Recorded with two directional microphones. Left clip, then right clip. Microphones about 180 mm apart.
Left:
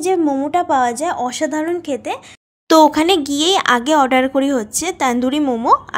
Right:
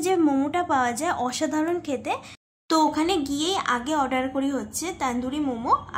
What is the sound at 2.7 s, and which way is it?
A woman's voice, 50° left (ahead or behind).